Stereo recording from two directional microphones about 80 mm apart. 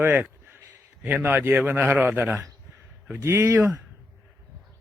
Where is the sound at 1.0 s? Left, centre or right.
Right.